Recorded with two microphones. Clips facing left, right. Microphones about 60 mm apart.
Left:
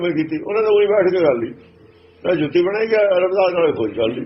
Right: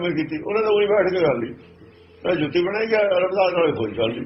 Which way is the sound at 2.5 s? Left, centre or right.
Left.